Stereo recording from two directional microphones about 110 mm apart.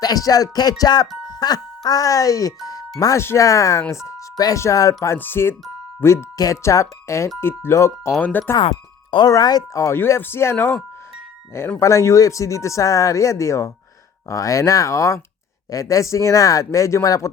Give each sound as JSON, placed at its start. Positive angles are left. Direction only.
{"t": 0.0, "sound": "music", "side_deg": 35}
{"t": 1.3, "sound": "speech", "side_deg": 35}
{"t": 4.4, "sound": "music", "side_deg": 30}
{"t": 5.1, "sound": "speech", "side_deg": 20}
{"t": 6.3, "sound": "speech", "side_deg": 30}
{"t": 9.0, "sound": "speech", "side_deg": 45}
{"t": 11.8, "sound": "speech", "side_deg": 25}